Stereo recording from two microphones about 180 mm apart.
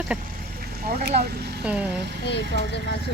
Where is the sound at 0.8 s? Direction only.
60° right (ahead or behind).